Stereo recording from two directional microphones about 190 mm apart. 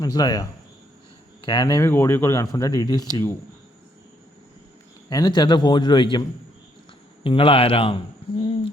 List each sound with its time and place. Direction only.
0.0 s a man's voice: 20° left (ahead or behind)
5.0 s a man's voice: 20° left (ahead or behind)
7.3 s a man's voice: 30° left (ahead or behind)